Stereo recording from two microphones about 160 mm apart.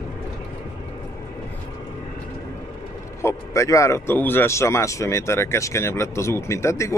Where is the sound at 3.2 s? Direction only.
20° left (ahead or behind).